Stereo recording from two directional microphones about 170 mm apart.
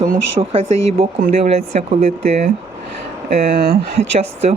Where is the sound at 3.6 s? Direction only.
70° right (ahead or behind).